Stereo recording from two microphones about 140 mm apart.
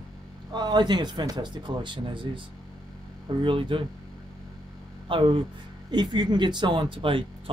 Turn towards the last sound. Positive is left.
turn(degrees=-40)  # may be behind; listen again after turning